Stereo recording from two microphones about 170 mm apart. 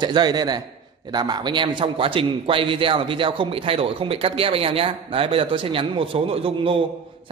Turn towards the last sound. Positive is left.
turn(degrees=-30)  # may be behind; listen again after turning